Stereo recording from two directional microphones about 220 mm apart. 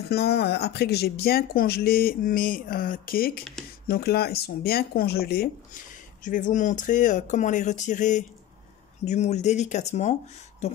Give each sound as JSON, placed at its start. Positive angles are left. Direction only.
{"t": 0.1, "sound": "speech", "side_deg": 50}